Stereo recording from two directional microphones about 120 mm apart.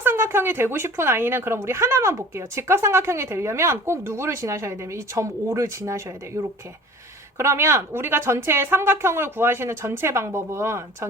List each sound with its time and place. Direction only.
0.0 s a woman's voice: 20° right (ahead or behind)
7.3 s a woman's voice: 20° right (ahead or behind)